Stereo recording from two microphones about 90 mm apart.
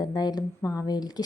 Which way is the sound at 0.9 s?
50° left (ahead or behind).